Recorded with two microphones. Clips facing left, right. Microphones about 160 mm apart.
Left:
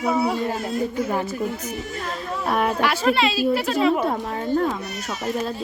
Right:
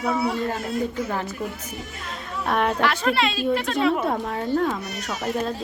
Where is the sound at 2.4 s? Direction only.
5° left (ahead or behind).